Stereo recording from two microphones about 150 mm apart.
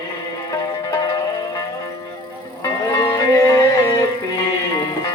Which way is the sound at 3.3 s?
20° left (ahead or behind).